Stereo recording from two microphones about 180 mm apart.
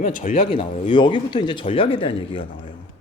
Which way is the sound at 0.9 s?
25° left (ahead or behind).